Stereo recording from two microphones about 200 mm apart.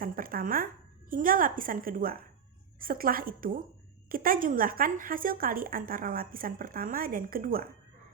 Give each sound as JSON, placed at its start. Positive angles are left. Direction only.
{"t": 0.0, "sound": "speech", "side_deg": -45}